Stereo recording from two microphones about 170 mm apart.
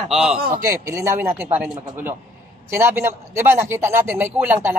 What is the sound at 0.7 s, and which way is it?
A man's voice, 20° right (ahead or behind).